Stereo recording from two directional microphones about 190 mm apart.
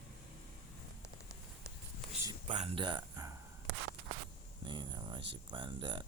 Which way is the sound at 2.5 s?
35° right (ahead or behind).